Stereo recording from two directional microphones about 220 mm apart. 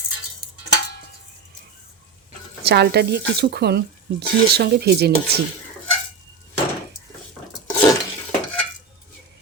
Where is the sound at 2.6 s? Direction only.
50° right (ahead or behind).